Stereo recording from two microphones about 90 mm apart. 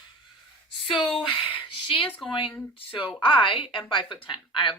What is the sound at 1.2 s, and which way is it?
Speech, 75° left (ahead or behind).